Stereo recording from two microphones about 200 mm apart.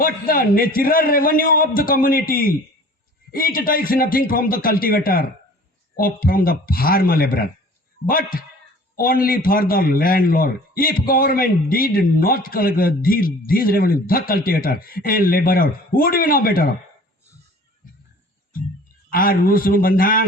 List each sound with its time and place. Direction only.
0.0 s a man's voice: 45° left (ahead or behind)
19.1 s a man's voice: 45° left (ahead or behind)